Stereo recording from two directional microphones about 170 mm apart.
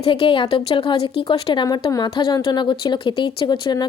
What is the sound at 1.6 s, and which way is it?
A woman's voice, 25° left (ahead or behind).